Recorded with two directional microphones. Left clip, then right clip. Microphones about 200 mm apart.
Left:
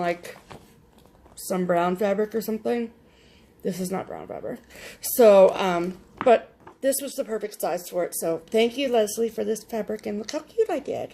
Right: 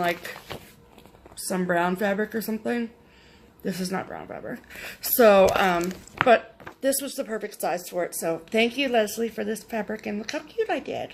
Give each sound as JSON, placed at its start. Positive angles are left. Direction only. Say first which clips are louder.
{"t": 0.0, "sound": "speech", "louder": "right 1 dB", "side_deg": 20}
{"t": 1.5, "sound": "speech", "louder": "left 1 dB", "side_deg": 20}